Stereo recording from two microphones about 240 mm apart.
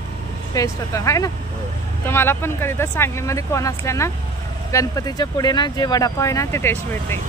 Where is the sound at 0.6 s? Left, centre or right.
Centre.